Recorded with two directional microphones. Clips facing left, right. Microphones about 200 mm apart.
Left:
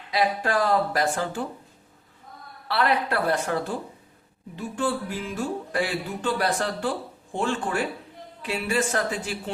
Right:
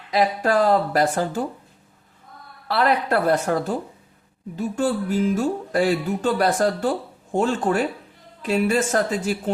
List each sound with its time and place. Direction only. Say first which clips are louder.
0.1 s speech: right 4 dB; 40° right (ahead or behind)
2.6 s speech: right 4 dB; 45° right (ahead or behind)